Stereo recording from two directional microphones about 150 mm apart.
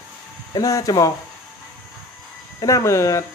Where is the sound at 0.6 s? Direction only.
25° left (ahead or behind).